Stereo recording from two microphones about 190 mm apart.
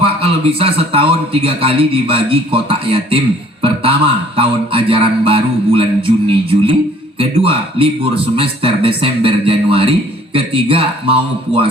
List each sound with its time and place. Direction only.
0.0 s a man's voice: 30° right (ahead or behind)